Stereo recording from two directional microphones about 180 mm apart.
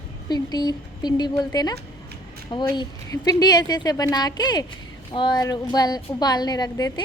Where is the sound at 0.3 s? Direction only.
20° left (ahead or behind).